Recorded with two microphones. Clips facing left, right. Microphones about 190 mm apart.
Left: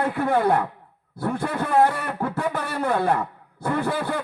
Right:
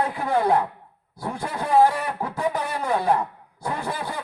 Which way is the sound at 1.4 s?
55° left (ahead or behind).